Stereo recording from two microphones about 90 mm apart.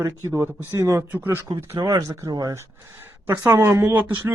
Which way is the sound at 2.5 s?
25° right (ahead or behind).